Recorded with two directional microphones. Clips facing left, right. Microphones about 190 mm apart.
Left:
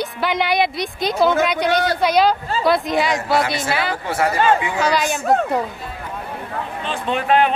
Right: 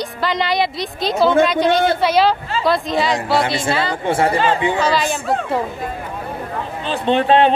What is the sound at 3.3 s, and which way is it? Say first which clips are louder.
Speech: right 2 dB; 30° right (ahead or behind).